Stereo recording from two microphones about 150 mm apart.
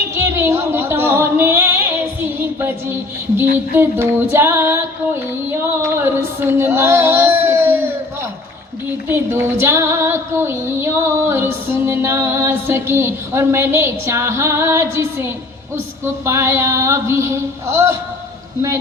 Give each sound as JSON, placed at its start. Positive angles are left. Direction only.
{"t": 0.1, "sound": "music", "side_deg": -15}
{"t": 9.0, "sound": "female singing", "side_deg": -15}
{"t": 16.0, "sound": "female singing", "side_deg": -15}